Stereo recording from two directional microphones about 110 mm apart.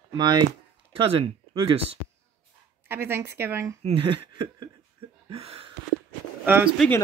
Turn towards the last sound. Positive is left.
turn(degrees=-20)  # may be behind; listen again after turning